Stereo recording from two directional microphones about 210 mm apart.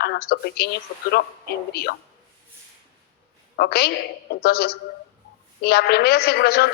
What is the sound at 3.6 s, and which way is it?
A woman's voice, 50° left (ahead or behind).